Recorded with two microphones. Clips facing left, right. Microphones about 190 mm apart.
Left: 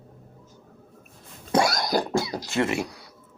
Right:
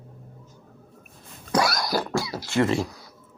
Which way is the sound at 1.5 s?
25° left (ahead or behind).